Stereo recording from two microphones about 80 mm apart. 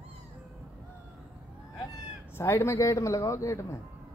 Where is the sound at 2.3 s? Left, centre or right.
Left.